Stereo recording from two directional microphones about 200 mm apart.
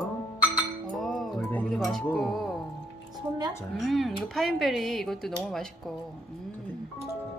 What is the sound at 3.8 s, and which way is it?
Speech, centre (ahead or behind).